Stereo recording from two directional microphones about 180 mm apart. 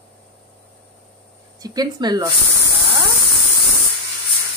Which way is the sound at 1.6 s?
20° right (ahead or behind).